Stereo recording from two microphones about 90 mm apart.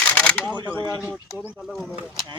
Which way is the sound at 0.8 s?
40° left (ahead or behind).